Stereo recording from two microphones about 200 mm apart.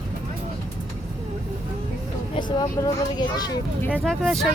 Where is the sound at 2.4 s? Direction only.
20° left (ahead or behind).